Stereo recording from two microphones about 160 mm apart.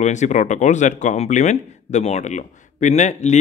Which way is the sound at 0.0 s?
45° left (ahead or behind).